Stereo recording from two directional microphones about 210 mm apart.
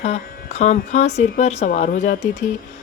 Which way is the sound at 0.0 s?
30° left (ahead or behind).